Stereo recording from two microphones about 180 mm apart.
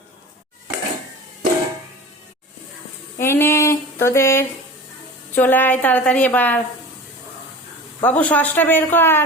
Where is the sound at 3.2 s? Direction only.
15° left (ahead or behind).